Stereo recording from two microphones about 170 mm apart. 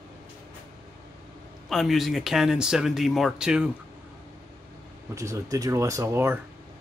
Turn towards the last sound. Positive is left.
turn(degrees=-15)  # may be behind; listen again after turning